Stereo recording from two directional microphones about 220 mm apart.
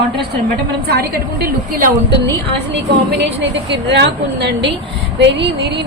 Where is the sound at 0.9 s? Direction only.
45° right (ahead or behind).